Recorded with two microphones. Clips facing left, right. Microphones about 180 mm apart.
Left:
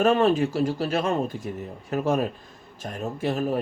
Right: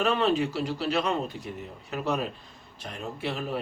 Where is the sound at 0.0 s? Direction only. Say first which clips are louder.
Left 5 dB; 45° left (ahead or behind).